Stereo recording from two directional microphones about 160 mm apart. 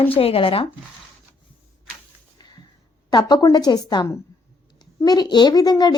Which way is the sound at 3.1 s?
25° left (ahead or behind).